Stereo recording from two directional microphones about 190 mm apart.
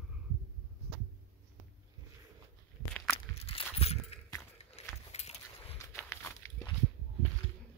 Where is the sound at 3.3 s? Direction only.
30° left (ahead or behind).